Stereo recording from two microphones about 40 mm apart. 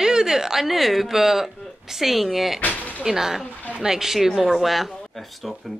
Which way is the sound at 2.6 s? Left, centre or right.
Left.